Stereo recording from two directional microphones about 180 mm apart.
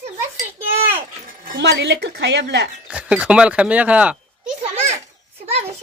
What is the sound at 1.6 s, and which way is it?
A woman's voice, 70° right (ahead or behind).